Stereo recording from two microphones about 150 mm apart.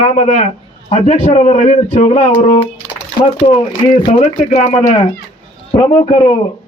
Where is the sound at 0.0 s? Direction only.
50° left (ahead or behind).